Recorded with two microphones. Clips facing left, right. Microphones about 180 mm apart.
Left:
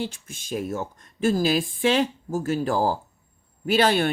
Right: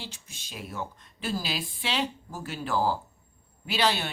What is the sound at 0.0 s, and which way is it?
Speech, 50° left (ahead or behind).